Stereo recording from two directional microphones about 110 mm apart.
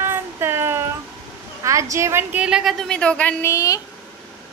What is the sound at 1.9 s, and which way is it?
Child singing, 25° right (ahead or behind).